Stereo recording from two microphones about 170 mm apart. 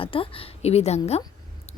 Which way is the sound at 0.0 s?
30° left (ahead or behind).